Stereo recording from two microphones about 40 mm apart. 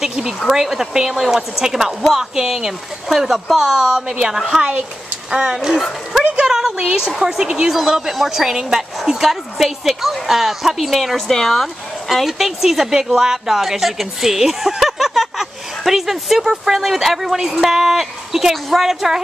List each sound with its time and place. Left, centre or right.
0.0 s a sound: centre
0.5 s a woman's voice: centre
7.7 s a woman's voice: centre
11.1 s speech: centre